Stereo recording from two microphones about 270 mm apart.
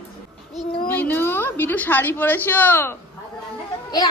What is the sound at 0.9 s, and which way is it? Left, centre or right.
A woman's voice, centre.